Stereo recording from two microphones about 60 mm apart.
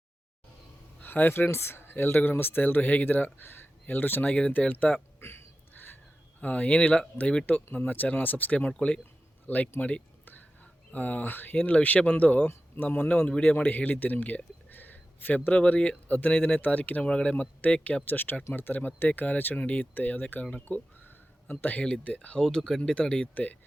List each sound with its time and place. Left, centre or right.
0.9 s speech: left
5.2 s a sound: left
6.4 s speech: left
8.5 s speech: centre
18.0 s speech: left
20.7 s a sound: left
22.0 s speech: left
22.4 s speech: centre; by 23.6 s left